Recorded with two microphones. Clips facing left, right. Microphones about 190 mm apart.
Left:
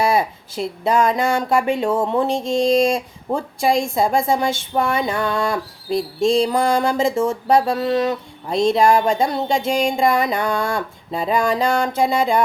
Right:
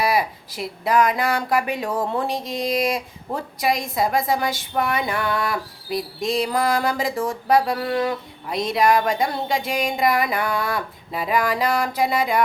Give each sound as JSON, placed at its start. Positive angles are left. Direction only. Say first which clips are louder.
{"t": 0.0, "sound": "speech", "louder": "left 3 dB", "side_deg": 25}